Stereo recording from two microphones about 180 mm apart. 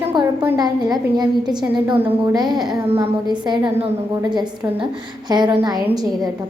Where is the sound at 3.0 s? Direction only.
25° right (ahead or behind).